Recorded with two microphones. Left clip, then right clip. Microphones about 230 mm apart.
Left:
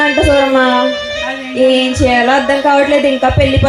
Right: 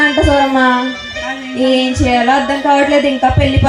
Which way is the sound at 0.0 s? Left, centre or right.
Left.